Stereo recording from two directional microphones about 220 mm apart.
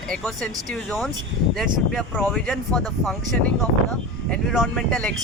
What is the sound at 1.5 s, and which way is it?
Speech, centre (ahead or behind).